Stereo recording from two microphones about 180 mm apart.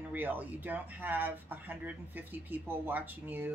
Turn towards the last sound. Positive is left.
turn(degrees=-10)  # may be behind; listen again after turning